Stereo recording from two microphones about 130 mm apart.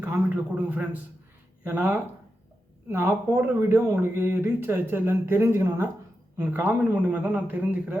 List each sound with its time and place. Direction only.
0.5 s speech: 10° right (ahead or behind)